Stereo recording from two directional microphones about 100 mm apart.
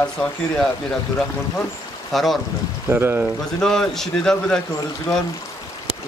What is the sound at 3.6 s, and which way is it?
A man's voice, 5° left (ahead or behind).